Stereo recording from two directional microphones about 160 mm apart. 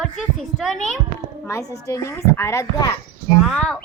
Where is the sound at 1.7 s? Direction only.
20° left (ahead or behind).